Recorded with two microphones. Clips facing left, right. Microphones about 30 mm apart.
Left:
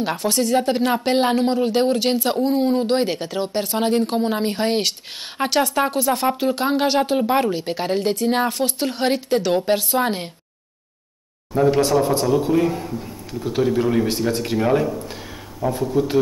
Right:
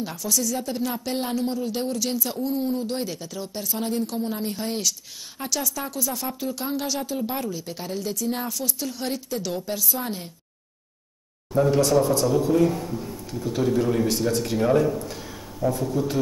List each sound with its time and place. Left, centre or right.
0.0 s speech: left
11.5 s a man's voice: left